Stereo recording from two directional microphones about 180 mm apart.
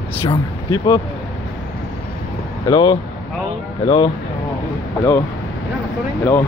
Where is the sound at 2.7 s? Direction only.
30° left (ahead or behind).